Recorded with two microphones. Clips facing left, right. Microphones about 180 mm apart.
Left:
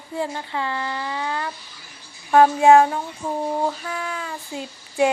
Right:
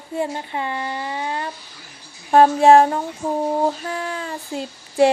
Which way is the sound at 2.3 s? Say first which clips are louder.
Right 2 dB; 35° right (ahead or behind).